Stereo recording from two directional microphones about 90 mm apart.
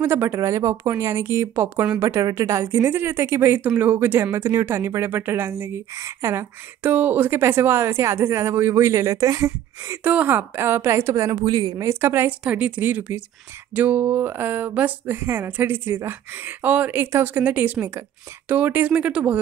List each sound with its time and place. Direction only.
0.0 s speech: 25° right (ahead or behind)
6.8 s speech: 20° right (ahead or behind)
10.0 s speech: 20° right (ahead or behind); by 11.7 s 45° right (ahead or behind)
11.8 s speech: 25° right (ahead or behind)
12.4 s speech: 15° right (ahead or behind)